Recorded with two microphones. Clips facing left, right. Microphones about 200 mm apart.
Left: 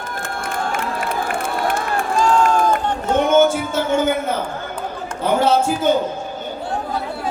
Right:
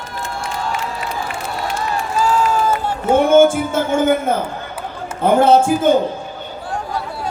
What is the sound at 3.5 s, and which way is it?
A man's voice, 50° right (ahead or behind).